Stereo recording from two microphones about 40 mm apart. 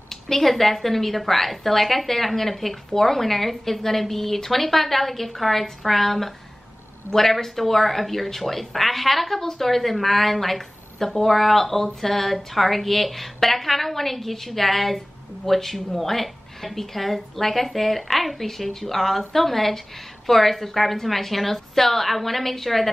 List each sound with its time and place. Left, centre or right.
0.1 s speech: centre